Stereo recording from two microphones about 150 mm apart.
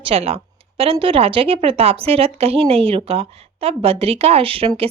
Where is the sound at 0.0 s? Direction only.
40° right (ahead or behind).